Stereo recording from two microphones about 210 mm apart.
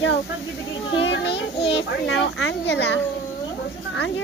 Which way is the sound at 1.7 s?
60° left (ahead or behind).